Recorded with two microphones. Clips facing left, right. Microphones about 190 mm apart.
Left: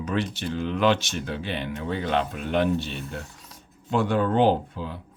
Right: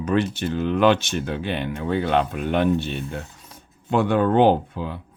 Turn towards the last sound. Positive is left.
turn(degrees=-60)  # may be behind; listen again after turning